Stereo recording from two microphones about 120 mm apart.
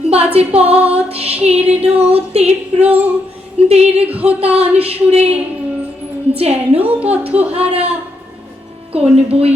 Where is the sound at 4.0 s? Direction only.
10° right (ahead or behind).